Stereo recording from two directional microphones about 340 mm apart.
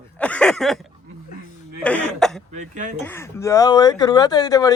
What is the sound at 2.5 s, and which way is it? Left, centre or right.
Speech, right.